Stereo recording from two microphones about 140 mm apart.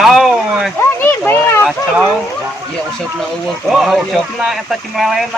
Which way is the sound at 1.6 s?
5° right (ahead or behind).